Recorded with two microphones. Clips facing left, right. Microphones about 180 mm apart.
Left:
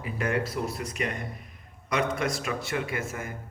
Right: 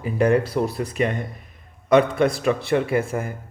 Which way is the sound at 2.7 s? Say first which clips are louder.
Right 10 dB; 30° right (ahead or behind).